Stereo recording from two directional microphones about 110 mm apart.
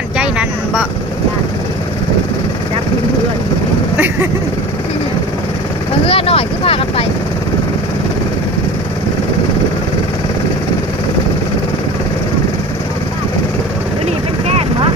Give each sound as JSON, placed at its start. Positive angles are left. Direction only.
{"t": 0.2, "sound": "vehicle", "side_deg": -10}
{"t": 3.9, "sound": "vehicle", "side_deg": -20}
{"t": 6.1, "sound": "speech", "side_deg": 60}